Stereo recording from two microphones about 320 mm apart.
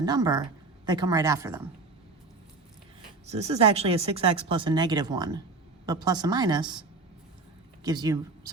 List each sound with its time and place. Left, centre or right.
0.0 s speech: centre
3.2 s speech: centre
7.9 s speech: centre